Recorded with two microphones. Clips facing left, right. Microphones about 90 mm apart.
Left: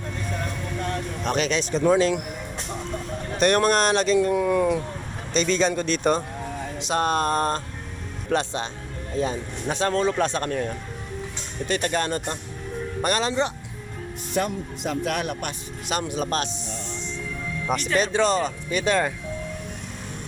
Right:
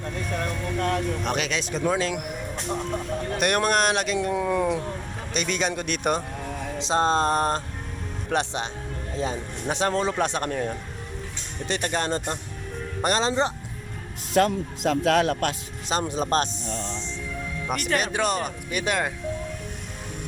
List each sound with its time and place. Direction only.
1.2 s speech: 5° right (ahead or behind)
3.3 s speech: 10° right (ahead or behind)
6.7 s speech: 25° right (ahead or behind)
14.3 s speech: 90° right
15.9 s speech: 30° right (ahead or behind)
17.7 s speech: 55° right (ahead or behind)
18.0 s speech: 10° right (ahead or behind)